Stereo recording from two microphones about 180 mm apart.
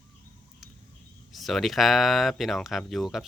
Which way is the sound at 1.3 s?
Centre (ahead or behind).